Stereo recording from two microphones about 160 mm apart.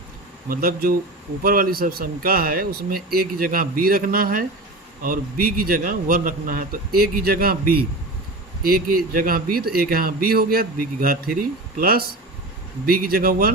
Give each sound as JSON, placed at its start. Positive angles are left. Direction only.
{"t": 0.4, "sound": "speech", "side_deg": -65}